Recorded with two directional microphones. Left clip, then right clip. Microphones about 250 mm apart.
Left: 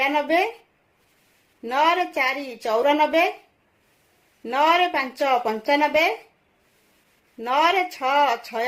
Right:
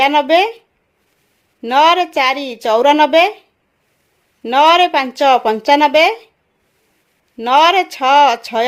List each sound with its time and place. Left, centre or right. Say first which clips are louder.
0.0 s a woman's voice: right 9 dB; right
1.6 s a woman's voice: right 9 dB; right
4.4 s a woman's voice: right 9 dB; right
7.3 s a woman's voice: right 9 dB; right